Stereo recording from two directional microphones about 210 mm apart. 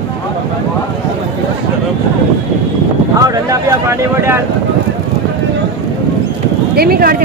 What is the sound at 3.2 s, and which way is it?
Speech, 15° right (ahead or behind).